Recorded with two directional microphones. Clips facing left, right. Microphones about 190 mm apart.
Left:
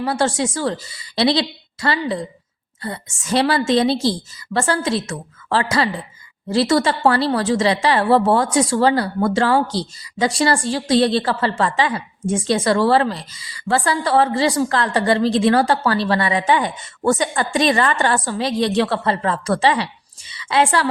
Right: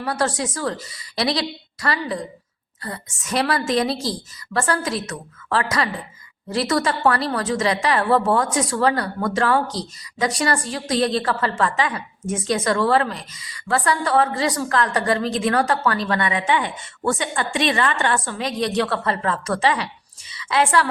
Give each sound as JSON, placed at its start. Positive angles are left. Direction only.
{"t": 0.0, "sound": "a woman's voice", "side_deg": 25}